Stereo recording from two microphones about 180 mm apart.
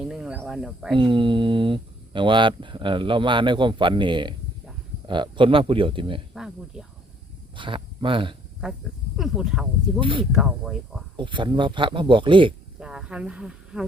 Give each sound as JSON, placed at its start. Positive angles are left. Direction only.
{"t": 0.1, "sound": "cricket", "side_deg": -5}
{"t": 0.9, "sound": "speech", "side_deg": -25}
{"t": 6.3, "sound": "speech", "side_deg": -5}
{"t": 7.5, "sound": "speech", "side_deg": -25}
{"t": 8.6, "sound": "speech", "side_deg": 0}
{"t": 10.0, "sound": "speech", "side_deg": -30}
{"t": 10.3, "sound": "speech", "side_deg": 0}
{"t": 11.2, "sound": "speech", "side_deg": -25}
{"t": 12.8, "sound": "speech", "side_deg": -5}